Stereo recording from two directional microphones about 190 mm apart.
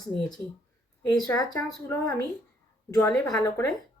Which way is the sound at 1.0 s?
20° left (ahead or behind).